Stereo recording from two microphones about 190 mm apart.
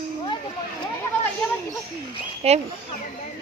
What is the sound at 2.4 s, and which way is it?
Speech, 35° right (ahead or behind).